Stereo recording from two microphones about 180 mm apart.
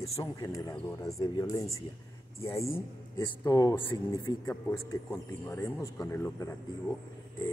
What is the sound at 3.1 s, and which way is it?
Speech, 20° left (ahead or behind).